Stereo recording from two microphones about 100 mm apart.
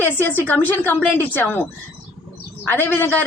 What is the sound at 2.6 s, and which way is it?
Speech, 20° left (ahead or behind).